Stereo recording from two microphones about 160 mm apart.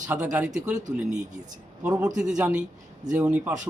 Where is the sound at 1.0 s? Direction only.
50° right (ahead or behind).